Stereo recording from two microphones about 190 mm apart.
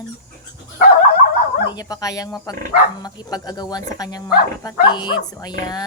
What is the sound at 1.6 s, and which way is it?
Speech, 20° left (ahead or behind).